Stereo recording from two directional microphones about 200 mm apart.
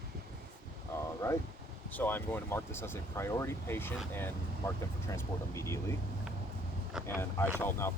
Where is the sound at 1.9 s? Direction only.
10° left (ahead or behind).